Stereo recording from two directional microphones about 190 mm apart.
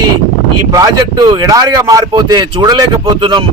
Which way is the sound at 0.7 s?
20° right (ahead or behind).